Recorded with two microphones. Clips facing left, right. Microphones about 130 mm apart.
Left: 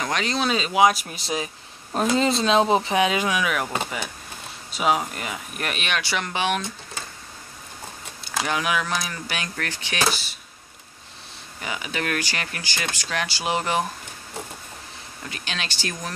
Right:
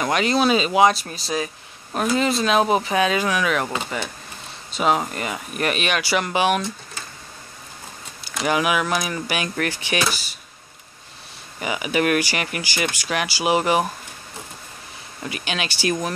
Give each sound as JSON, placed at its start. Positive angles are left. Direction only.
{"t": 0.0, "sound": "speech", "side_deg": -5}
{"t": 0.9, "sound": "speech", "side_deg": 15}
{"t": 4.7, "sound": "speech", "side_deg": 5}
{"t": 8.2, "sound": "speech", "side_deg": -5}
{"t": 11.6, "sound": "speech", "side_deg": -10}
{"t": 15.2, "sound": "speech", "side_deg": -10}